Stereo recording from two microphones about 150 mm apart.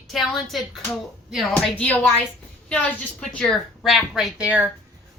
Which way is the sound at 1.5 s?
10° left (ahead or behind).